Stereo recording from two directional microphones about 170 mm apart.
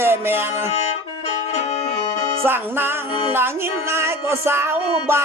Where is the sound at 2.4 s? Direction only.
15° right (ahead or behind).